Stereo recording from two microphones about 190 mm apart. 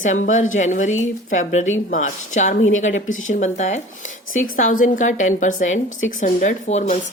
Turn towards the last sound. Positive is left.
turn(degrees=40)  # may be behind; listen again after turning